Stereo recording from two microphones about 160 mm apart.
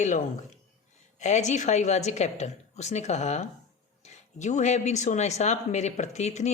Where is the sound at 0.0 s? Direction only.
50° left (ahead or behind).